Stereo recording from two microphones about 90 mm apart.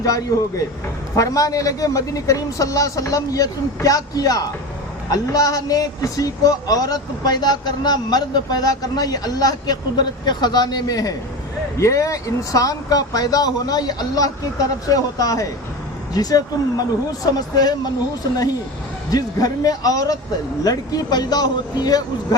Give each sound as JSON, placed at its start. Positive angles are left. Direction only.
{"t": 0.0, "sound": "a man's voice", "side_deg": 40}
{"t": 19.1, "sound": "a man's voice", "side_deg": 45}